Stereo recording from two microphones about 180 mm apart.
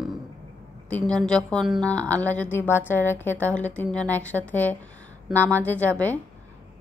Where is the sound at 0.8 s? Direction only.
5° left (ahead or behind).